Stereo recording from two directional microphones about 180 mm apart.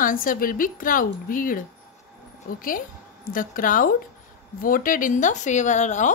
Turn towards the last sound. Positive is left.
turn(degrees=40)  # may be behind; listen again after turning